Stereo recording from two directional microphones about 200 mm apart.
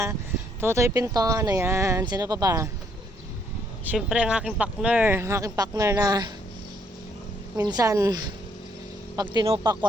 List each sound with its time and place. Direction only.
0.6 s speech: 15° right (ahead or behind)
3.9 s speech: 5° right (ahead or behind)
7.5 s speech: 20° right (ahead or behind)
9.3 s speech: 25° right (ahead or behind)